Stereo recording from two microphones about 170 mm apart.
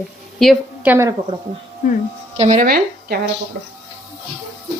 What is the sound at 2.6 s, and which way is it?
Speech, 65° right (ahead or behind).